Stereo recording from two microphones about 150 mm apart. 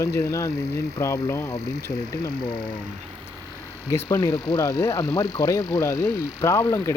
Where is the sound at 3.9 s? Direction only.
20° left (ahead or behind).